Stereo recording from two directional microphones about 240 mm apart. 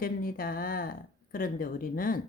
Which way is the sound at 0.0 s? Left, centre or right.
Left.